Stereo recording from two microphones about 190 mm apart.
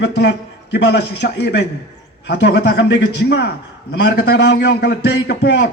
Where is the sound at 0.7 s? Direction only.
65° left (ahead or behind).